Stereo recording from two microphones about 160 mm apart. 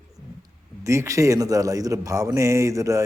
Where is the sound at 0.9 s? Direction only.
20° right (ahead or behind).